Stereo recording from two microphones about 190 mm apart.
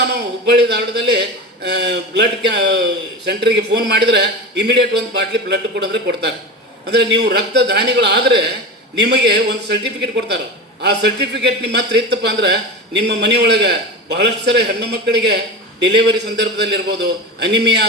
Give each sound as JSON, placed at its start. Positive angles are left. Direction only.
{"t": 0.0, "sound": "a man's voice", "side_deg": -60}